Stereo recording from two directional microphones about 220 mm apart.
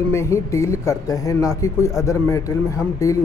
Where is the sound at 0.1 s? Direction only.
15° left (ahead or behind).